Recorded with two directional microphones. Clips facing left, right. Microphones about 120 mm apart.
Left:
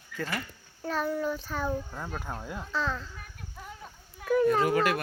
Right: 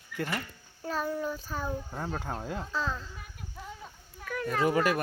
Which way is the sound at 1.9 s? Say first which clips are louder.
Right 2 dB; 25° right (ahead or behind).